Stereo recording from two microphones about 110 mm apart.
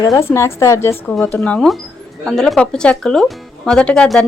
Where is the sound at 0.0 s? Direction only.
35° left (ahead or behind).